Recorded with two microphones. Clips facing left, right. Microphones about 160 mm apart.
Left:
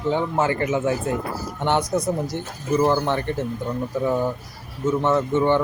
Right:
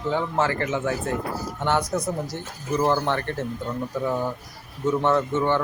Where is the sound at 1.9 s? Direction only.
15° left (ahead or behind).